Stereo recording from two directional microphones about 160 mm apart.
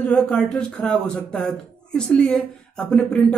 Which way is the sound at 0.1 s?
5° left (ahead or behind).